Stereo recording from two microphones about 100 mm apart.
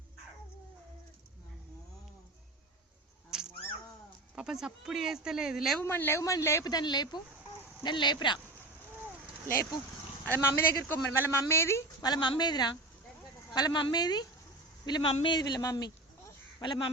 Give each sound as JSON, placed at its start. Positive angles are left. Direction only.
{"t": 4.4, "sound": "speech", "side_deg": -5}
{"t": 5.8, "sound": "speech", "side_deg": 25}
{"t": 6.7, "sound": "a woman's voice", "side_deg": 45}
{"t": 10.2, "sound": "speech", "side_deg": 20}
{"t": 12.0, "sound": "a woman's voice", "side_deg": 45}
{"t": 16.6, "sound": "speech", "side_deg": 55}